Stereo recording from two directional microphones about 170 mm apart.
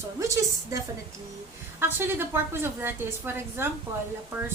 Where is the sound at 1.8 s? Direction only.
15° right (ahead or behind).